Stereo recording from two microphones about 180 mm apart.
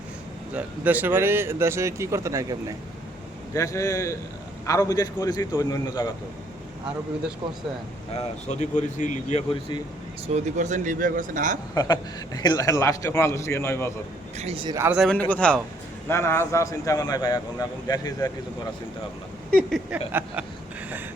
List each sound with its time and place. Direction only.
0.5 s speech: 10° right (ahead or behind)
3.5 s a man's voice: 15° left (ahead or behind)
8.1 s speech: 40° left (ahead or behind)
10.3 s speech: 45° right (ahead or behind)
11.7 s a man's voice: 20° left (ahead or behind)
14.3 s speech: 35° right (ahead or behind)
14.8 s a man's voice: 5° right (ahead or behind); by 18.3 s 20° left (ahead or behind)
19.5 s a man's voice: 5° left (ahead or behind)